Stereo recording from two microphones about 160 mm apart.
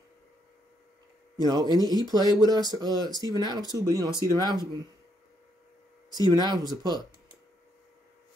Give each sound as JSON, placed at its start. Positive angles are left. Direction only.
{"t": 1.4, "sound": "speech", "side_deg": -25}
{"t": 6.1, "sound": "speech", "side_deg": -25}